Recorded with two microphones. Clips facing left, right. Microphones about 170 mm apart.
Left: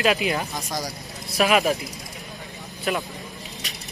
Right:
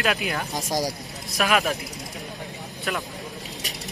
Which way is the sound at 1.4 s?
Centre (ahead or behind).